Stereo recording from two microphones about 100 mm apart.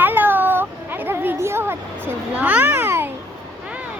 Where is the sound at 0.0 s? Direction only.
20° right (ahead or behind).